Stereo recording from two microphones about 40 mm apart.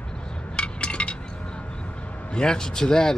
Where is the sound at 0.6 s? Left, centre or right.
Left.